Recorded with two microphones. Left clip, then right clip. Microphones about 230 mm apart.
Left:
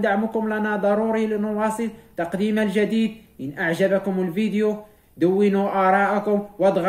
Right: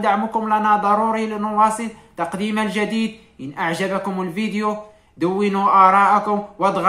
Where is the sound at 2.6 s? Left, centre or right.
Centre.